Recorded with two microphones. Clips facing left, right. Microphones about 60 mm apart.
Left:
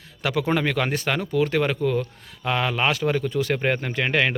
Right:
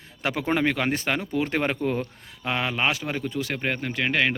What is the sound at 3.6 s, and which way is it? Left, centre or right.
Speech, centre.